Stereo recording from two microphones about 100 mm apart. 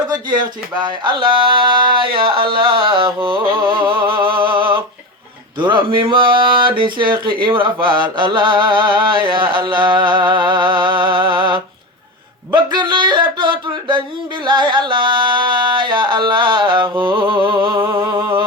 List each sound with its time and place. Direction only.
0.1 s speech: 45° right (ahead or behind)
12.5 s a sound: 50° right (ahead or behind)
14.4 s music: 50° right (ahead or behind)
16.8 s a sound: 25° right (ahead or behind)
17.4 s speech: 50° right (ahead or behind)
17.7 s humming: 30° right (ahead or behind)